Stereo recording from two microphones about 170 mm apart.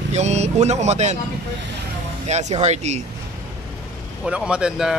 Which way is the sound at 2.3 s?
40° right (ahead or behind).